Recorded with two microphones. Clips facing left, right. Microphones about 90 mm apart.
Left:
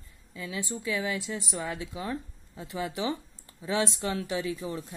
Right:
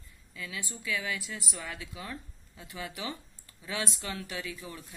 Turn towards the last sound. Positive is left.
turn(degrees=25)  # may be behind; listen again after turning